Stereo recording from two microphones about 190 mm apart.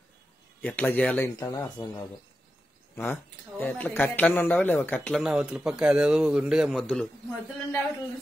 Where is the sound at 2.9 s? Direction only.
10° left (ahead or behind).